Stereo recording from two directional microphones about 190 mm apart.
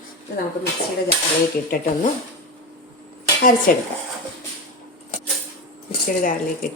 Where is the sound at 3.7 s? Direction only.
45° left (ahead or behind).